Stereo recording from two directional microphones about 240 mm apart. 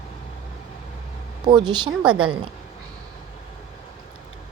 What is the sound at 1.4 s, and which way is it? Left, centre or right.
Speech, centre.